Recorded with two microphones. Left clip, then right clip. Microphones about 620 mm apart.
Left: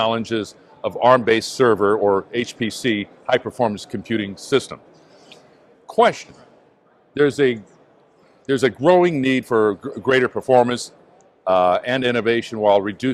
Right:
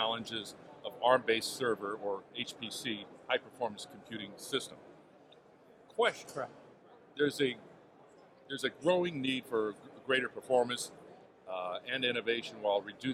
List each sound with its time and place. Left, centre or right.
0.0 s a man's voice: left
5.9 s a man's voice: left